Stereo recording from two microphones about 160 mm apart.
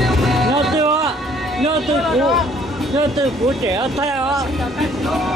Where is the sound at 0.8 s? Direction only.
20° right (ahead or behind).